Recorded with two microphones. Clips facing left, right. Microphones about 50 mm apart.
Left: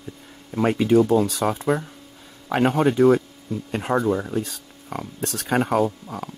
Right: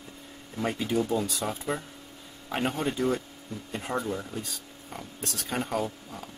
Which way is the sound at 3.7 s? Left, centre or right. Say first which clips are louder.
Left 9 dB; left.